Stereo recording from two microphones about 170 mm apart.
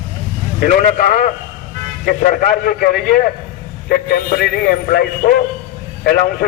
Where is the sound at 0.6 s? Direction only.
55° left (ahead or behind).